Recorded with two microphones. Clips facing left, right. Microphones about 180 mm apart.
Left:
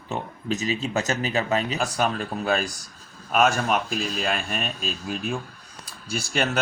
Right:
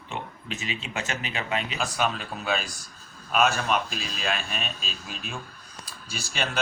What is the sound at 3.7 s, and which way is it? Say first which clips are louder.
Speech: left 3 dB; 50° left (ahead or behind).